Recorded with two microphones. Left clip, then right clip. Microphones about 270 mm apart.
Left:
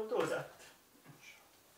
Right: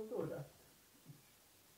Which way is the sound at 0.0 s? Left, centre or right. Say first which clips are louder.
Left 9 dB; centre.